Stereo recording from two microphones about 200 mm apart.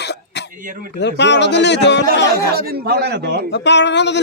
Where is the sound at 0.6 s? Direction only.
40° right (ahead or behind).